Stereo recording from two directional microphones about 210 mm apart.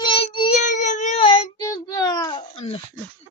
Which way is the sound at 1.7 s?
15° left (ahead or behind).